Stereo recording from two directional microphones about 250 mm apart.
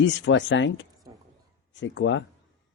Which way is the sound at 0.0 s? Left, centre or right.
Left.